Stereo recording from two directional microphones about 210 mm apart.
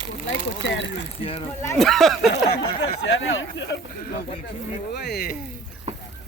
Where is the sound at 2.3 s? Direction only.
50° left (ahead or behind).